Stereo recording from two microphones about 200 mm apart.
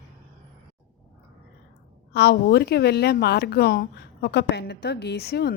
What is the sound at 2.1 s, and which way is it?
A woman's voice, 55° left (ahead or behind).